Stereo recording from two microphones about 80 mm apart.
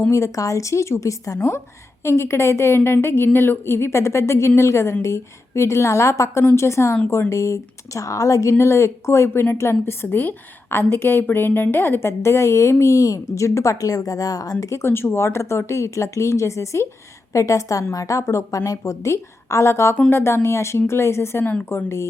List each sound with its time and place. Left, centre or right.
0.1 s a woman's voice: left